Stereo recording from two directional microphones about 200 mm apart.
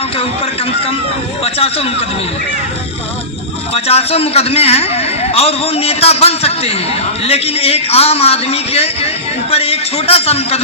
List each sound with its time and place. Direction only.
1.5 s a man's voice: 30° left (ahead or behind)
3.8 s a man's voice: 30° left (ahead or behind)